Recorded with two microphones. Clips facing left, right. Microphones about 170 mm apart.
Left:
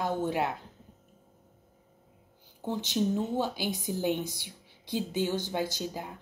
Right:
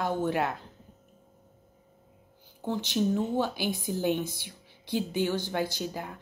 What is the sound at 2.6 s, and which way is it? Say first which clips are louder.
A woman's voice: right 1 dB; 20° left (ahead or behind).